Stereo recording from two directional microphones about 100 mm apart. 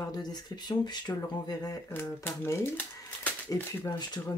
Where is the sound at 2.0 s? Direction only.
30° left (ahead or behind).